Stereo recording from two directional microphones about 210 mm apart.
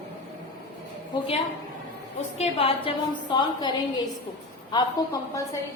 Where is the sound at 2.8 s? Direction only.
20° left (ahead or behind).